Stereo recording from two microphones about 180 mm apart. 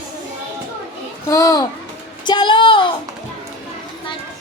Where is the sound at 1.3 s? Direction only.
20° left (ahead or behind).